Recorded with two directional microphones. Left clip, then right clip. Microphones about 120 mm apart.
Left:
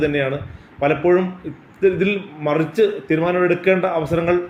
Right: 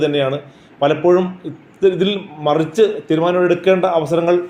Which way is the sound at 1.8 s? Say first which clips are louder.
Right 2 dB; 25° right (ahead or behind).